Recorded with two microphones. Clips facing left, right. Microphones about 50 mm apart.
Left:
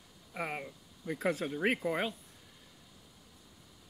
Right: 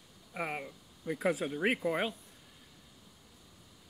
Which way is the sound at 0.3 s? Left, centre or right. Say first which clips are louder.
Right 1 dB; centre.